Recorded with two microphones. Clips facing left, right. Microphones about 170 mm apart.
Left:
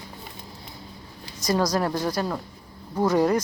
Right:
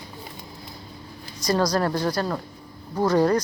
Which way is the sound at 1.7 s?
10° left (ahead or behind).